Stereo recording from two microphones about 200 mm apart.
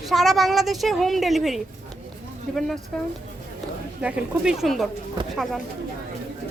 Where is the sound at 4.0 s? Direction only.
5° right (ahead or behind).